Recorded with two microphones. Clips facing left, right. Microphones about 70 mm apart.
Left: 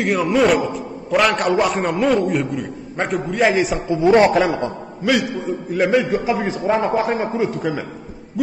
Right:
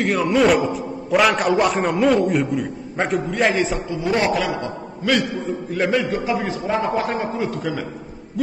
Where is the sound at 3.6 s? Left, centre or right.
Centre.